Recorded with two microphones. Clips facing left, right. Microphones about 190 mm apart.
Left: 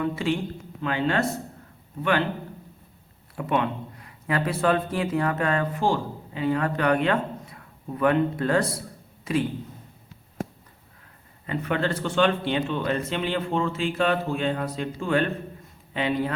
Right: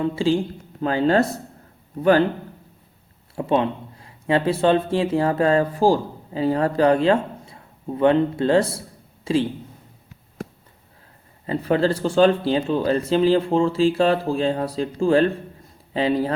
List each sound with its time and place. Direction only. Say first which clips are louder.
0.0 s a man's voice: right 5 dB; 30° right (ahead or behind)
3.3 s speech: right 5 dB; 30° right (ahead or behind)
11.4 s speech: right 6 dB; 35° right (ahead or behind)